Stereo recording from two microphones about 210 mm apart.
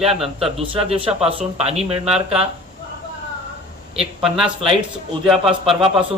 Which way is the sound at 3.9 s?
Centre (ahead or behind).